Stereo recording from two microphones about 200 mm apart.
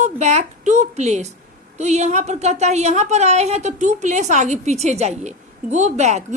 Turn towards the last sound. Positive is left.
turn(degrees=-35)  # may be behind; listen again after turning